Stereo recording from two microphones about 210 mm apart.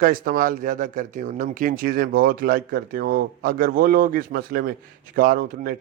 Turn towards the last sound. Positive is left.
turn(degrees=-40)  # may be behind; listen again after turning